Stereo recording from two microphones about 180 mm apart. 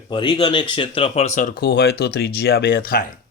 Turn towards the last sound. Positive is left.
turn(degrees=55)  # may be behind; listen again after turning